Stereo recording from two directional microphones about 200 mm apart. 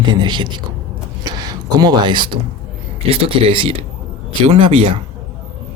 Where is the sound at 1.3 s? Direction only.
20° right (ahead or behind).